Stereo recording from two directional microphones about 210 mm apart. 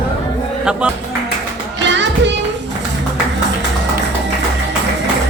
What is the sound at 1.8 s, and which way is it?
Music, 60° right (ahead or behind).